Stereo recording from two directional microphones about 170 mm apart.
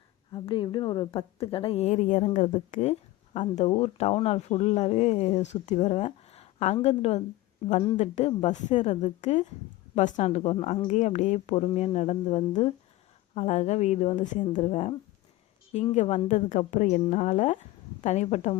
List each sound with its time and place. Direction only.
0.3 s a woman's voice: 30° left (ahead or behind)